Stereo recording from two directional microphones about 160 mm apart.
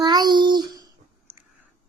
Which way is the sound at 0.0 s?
25° right (ahead or behind).